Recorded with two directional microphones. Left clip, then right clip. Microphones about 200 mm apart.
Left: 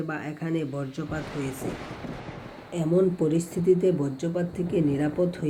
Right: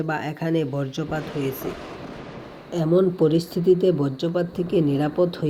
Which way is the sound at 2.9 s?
25° right (ahead or behind).